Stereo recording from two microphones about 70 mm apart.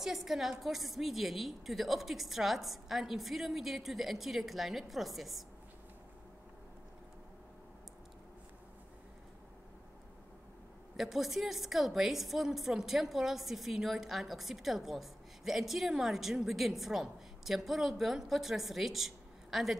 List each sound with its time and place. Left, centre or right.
0.0 s a woman's voice: centre
11.0 s a woman's voice: centre